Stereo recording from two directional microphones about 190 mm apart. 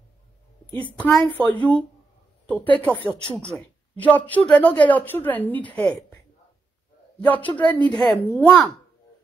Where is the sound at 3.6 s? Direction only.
10° left (ahead or behind).